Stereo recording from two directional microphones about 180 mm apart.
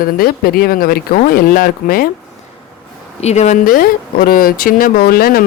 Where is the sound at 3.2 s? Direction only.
40° left (ahead or behind).